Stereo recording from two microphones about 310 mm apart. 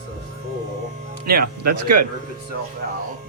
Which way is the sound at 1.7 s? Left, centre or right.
Right.